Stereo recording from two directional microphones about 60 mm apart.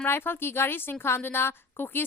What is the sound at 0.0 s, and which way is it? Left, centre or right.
A woman's voice, left.